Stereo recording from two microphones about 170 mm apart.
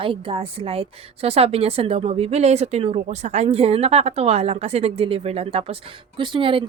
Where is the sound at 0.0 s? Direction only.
30° right (ahead or behind).